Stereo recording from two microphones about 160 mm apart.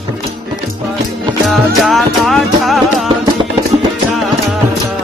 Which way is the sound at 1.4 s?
Centre (ahead or behind).